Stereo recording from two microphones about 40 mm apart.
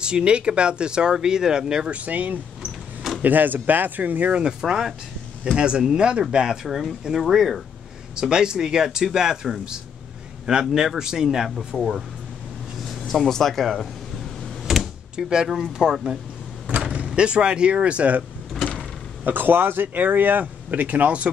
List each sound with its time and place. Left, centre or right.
0.0 s speech: right
1.9 s speech: right
2.6 s a sound: centre
3.2 s speech: right
4.4 s speech: centre
8.2 s speech: centre
11.4 s speech: centre
15.1 s speech: right
19.2 s speech: right